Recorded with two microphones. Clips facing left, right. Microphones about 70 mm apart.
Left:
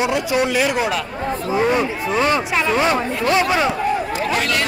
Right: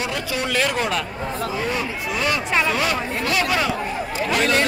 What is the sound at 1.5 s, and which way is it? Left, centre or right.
Speech, left.